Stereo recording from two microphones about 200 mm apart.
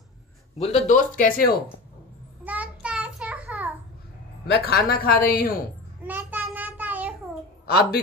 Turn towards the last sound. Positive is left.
turn(degrees=50)  # may be behind; listen again after turning